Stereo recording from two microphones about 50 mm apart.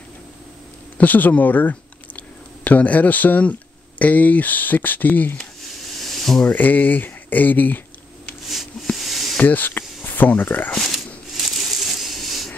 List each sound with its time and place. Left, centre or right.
0.9 s speech: left
5.9 s a sound: centre
6.5 s speech: left
8.9 s a sound: centre
9.4 s speech: left
11.3 s crushing: centre